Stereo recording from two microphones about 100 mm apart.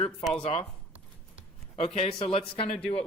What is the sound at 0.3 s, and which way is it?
Speech, 80° left.